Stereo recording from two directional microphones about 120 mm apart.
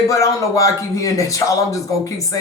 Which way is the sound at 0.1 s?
30° left (ahead or behind).